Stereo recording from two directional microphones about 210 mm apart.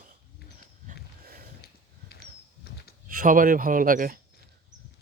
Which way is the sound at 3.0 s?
40° right (ahead or behind).